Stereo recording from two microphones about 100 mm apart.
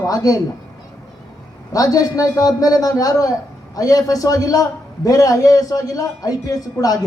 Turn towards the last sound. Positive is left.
turn(degrees=40)  # may be behind; listen again after turning